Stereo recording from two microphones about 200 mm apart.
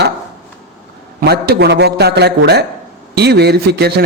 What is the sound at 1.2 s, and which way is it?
A man's voice, 50° right (ahead or behind).